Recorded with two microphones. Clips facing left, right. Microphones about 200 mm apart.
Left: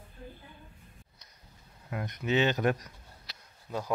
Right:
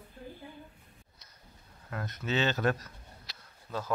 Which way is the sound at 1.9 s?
15° left (ahead or behind).